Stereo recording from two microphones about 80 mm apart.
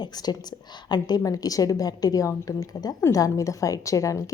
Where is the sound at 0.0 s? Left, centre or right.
Left.